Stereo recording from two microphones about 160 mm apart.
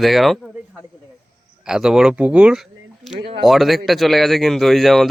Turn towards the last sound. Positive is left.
turn(degrees=0)  # may be behind; listen again after turning